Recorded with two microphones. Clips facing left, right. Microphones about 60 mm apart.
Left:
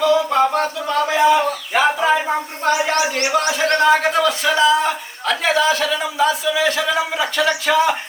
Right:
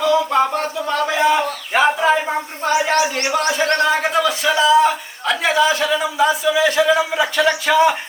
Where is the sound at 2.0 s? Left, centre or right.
Centre.